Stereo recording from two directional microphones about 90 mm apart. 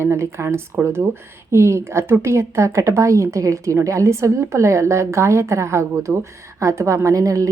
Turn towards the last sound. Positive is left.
turn(degrees=-40)  # may be behind; listen again after turning